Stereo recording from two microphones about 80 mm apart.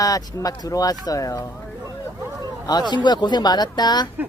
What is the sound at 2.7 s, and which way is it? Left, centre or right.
Speech, left.